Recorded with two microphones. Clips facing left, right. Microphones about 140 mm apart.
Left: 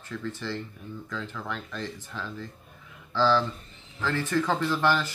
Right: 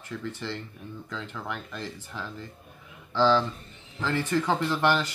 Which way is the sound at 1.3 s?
15° right (ahead or behind).